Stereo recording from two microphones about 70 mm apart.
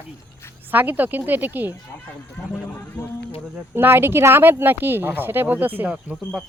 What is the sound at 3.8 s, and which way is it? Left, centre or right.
Speech, right.